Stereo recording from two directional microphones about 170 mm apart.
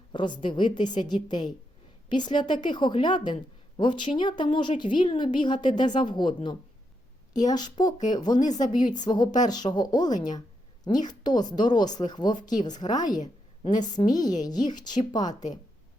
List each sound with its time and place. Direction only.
0.1 s a woman's voice: 30° left (ahead or behind)
0.8 s a woman's voice: 45° left (ahead or behind)
1.0 s a woman's voice: 25° left (ahead or behind)
8.4 s a woman's voice: 45° left (ahead or behind)
9.0 s a woman's voice: 25° left (ahead or behind)
15.3 s a woman's voice: 45° left (ahead or behind)